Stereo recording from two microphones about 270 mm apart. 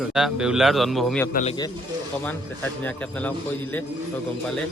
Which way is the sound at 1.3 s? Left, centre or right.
Left.